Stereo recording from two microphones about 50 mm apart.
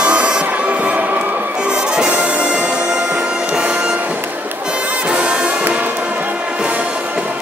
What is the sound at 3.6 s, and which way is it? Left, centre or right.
Music, right.